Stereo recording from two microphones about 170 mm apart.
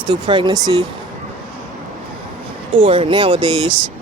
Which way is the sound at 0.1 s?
25° right (ahead or behind).